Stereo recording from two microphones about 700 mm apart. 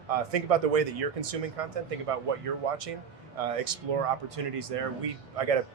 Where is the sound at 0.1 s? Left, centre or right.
Right.